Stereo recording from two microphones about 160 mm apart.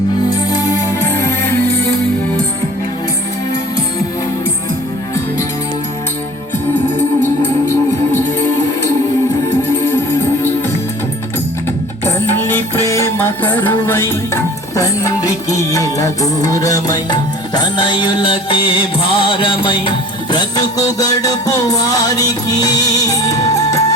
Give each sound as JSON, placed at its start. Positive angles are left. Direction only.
{"t": 0.3, "sound": "music", "side_deg": 20}
{"t": 7.7, "sound": "music", "side_deg": 15}
{"t": 12.0, "sound": "music", "side_deg": 15}